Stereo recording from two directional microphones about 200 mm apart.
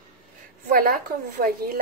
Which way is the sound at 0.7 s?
50° right (ahead or behind).